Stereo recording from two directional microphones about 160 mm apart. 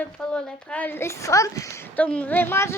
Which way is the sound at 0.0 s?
5° left (ahead or behind).